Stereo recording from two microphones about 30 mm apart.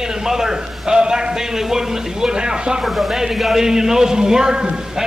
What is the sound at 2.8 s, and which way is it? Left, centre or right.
Speech, centre.